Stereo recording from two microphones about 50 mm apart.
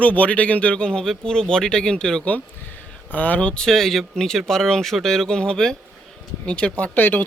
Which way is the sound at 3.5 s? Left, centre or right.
Centre.